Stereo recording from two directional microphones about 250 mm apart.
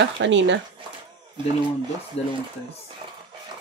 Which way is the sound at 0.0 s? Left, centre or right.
Right.